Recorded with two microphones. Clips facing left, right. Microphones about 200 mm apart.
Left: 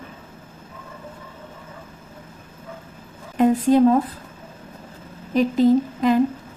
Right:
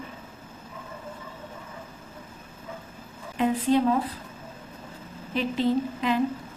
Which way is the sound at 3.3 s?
45° left (ahead or behind).